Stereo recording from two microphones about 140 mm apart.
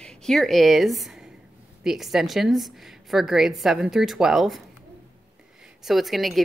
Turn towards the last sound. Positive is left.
turn(degrees=0)  # may be behind; listen again after turning